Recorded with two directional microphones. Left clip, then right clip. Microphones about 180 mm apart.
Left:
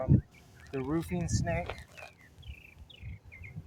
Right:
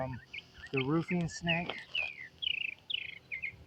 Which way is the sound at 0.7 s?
30° left (ahead or behind).